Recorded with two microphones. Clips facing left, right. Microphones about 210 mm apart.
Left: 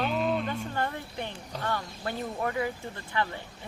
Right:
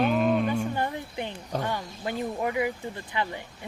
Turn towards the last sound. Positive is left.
turn(degrees=-15)  # may be behind; listen again after turning